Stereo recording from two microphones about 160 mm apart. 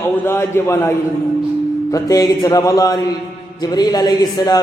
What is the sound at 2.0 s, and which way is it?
A man's voice, 20° left (ahead or behind).